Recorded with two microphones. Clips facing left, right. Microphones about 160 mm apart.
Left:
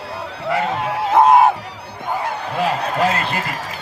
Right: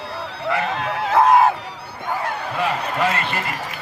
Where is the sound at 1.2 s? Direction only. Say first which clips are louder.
Left 2 dB; 20° left (ahead or behind).